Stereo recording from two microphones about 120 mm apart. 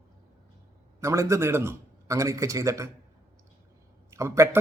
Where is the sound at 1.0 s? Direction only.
25° right (ahead or behind).